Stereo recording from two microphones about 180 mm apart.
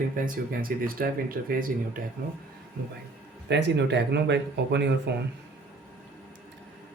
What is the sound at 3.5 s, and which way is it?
Speech, 75° right (ahead or behind).